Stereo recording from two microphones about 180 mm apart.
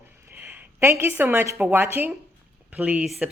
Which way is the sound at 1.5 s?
10° right (ahead or behind).